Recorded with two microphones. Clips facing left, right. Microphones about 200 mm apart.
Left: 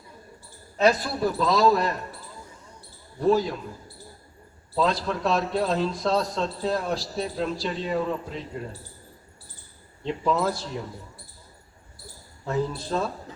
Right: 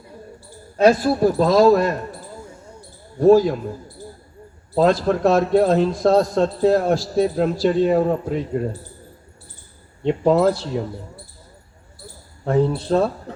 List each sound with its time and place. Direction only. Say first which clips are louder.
0.8 s a man's voice: right 7 dB; 45° right (ahead or behind)
3.2 s a man's voice: right 9 dB; 50° right (ahead or behind)
4.7 s a man's voice: right 8 dB; 50° right (ahead or behind)
10.0 s speech: right 9 dB; 60° right (ahead or behind)
12.5 s speech: right 9 dB; 60° right (ahead or behind)